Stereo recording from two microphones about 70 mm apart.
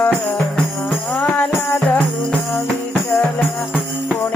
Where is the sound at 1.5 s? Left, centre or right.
Left.